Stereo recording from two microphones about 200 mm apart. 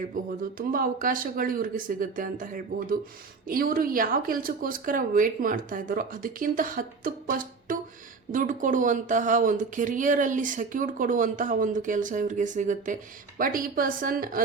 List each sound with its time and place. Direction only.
0.1 s speech: 40° right (ahead or behind)